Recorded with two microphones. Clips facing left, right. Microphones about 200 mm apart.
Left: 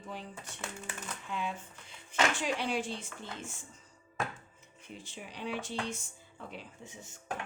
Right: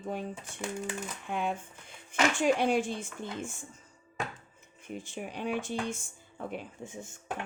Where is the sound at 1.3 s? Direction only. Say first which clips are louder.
Right 5 dB; 55° right (ahead or behind).